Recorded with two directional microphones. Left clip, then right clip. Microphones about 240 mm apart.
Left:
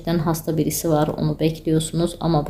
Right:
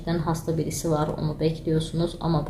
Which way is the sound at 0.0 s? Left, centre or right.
Left.